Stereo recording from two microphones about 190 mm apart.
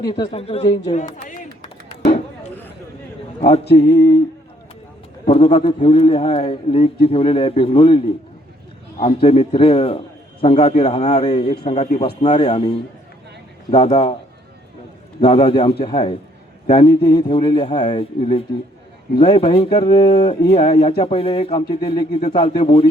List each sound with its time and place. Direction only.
0.0 s a man's voice: 25° left (ahead or behind)
1.1 s clapping: 40° left (ahead or behind)
3.8 s a sound: 60° left (ahead or behind)
5.2 s a man's voice: 30° left (ahead or behind)
15.2 s a man's voice: 30° left (ahead or behind)